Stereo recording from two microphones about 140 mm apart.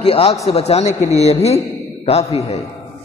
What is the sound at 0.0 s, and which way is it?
A man's voice, 45° left (ahead or behind).